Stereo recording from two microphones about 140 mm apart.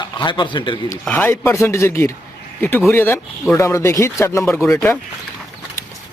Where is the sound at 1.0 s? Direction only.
10° left (ahead or behind).